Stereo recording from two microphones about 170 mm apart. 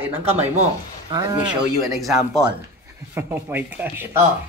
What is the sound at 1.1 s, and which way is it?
Speech, 20° right (ahead or behind).